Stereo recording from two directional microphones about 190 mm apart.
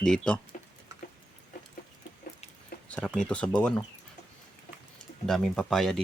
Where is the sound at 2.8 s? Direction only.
5° left (ahead or behind).